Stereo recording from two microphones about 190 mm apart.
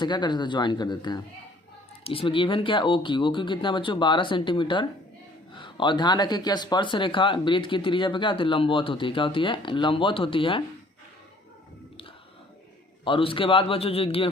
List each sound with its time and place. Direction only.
0.0 s speech: 25° left (ahead or behind)
13.1 s speech: 25° left (ahead or behind)